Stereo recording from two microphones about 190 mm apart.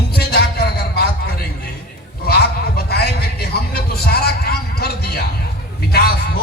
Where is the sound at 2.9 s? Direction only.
55° left (ahead or behind).